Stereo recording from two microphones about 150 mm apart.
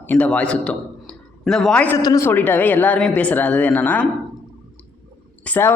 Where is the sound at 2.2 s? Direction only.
15° left (ahead or behind).